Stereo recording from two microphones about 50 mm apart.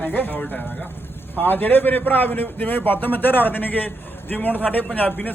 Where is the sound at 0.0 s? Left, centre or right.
Left.